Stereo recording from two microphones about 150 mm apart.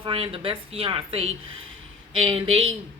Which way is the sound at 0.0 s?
40° right (ahead or behind).